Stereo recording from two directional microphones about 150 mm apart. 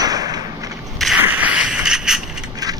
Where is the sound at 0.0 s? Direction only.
25° right (ahead or behind).